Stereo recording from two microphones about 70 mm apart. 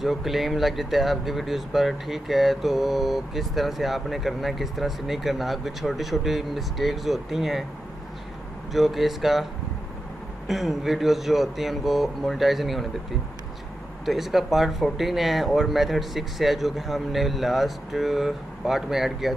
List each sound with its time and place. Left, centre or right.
0.0 s speech: centre
8.7 s speech: centre
10.5 s speech: centre
14.0 s speech: centre